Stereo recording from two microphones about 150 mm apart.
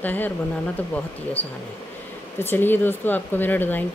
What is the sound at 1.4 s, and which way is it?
Speech, 10° left (ahead or behind).